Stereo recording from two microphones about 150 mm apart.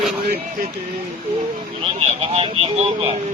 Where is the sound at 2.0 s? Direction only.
40° right (ahead or behind).